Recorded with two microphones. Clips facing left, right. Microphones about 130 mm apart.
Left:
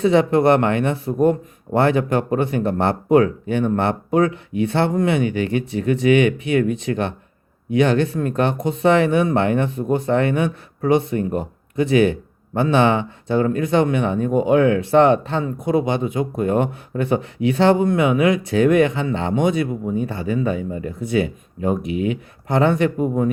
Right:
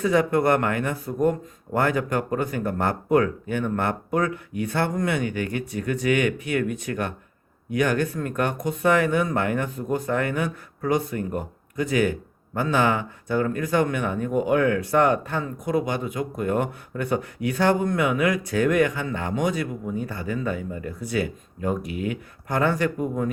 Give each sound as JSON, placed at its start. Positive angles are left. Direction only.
{"t": 0.0, "sound": "speech", "side_deg": 25}